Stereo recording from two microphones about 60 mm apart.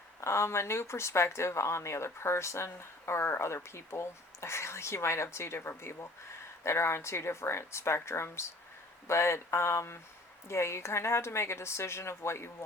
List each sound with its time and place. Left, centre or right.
0.2 s speech: left